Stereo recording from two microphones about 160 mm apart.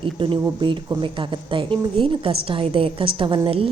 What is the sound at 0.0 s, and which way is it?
Speech, 30° right (ahead or behind).